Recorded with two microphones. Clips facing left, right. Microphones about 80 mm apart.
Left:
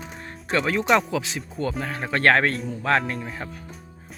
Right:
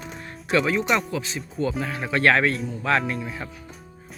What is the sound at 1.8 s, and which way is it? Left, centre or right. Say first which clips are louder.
Speech: left 1 dB; left.